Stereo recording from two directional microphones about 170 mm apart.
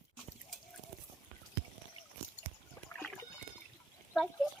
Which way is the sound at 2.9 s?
5° left (ahead or behind).